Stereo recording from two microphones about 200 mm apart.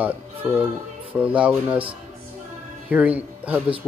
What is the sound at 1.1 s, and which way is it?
Speech, 5° right (ahead or behind).